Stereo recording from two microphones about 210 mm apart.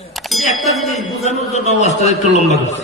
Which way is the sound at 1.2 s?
30° left (ahead or behind).